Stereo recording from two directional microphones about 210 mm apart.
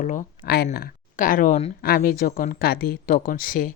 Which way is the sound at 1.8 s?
45° left (ahead or behind).